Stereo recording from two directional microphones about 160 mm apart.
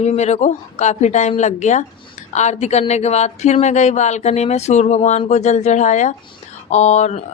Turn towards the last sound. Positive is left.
turn(degrees=45)  # may be behind; listen again after turning